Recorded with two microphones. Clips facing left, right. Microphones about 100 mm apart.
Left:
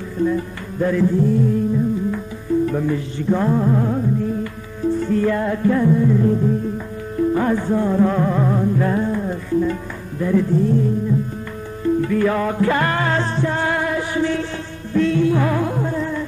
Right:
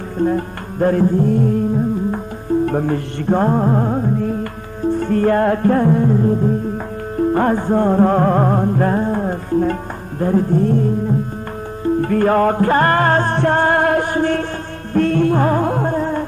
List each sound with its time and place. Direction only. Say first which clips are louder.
0.2 s music: right 2 dB; 50° right (ahead or behind)
2.6 s music: right 2 dB; 50° right (ahead or behind)
6.1 s music: right 1 dB; 35° right (ahead or behind)
7.2 s music: right 2 dB; 45° right (ahead or behind)